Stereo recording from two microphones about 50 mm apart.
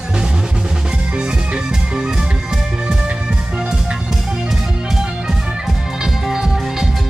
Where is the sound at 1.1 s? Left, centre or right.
Centre.